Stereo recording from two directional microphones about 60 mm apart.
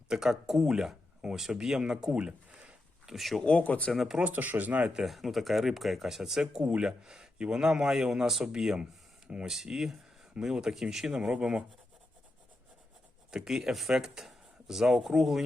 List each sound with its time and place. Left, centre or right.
0.1 s speech: centre
3.1 s speech: centre
3.4 s speech: left
3.9 s speech: centre
4.2 s speech: right
4.9 s speech: centre
8.8 s a sound: centre
9.6 s speech: centre
13.3 s speech: centre